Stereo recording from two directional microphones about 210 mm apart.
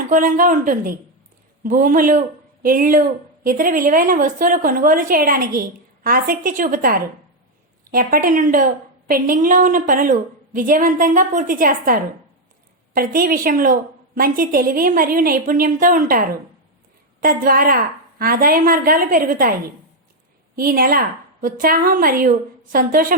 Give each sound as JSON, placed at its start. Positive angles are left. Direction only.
{"t": 0.1, "sound": "a woman's voice", "side_deg": -40}
{"t": 20.6, "sound": "a woman's voice", "side_deg": -45}